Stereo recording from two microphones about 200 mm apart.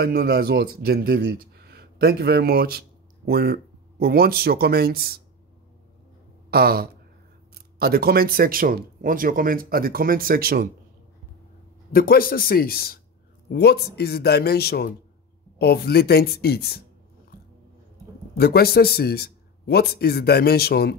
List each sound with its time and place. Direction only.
0.0 s speech: 50° right (ahead or behind)
6.5 s speech: 50° right (ahead or behind)
11.9 s a man's voice: 45° left (ahead or behind)
18.4 s a man's voice: 50° left (ahead or behind)